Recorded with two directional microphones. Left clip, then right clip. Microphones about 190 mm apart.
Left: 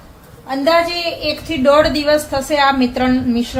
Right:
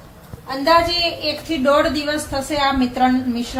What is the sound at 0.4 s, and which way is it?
Speech, 40° left (ahead or behind).